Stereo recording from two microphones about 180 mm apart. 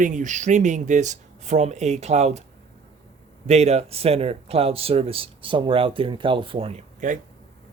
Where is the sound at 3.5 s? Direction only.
35° right (ahead or behind).